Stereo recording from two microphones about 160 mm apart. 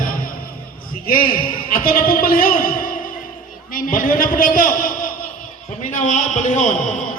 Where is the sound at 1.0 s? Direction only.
60° left (ahead or behind).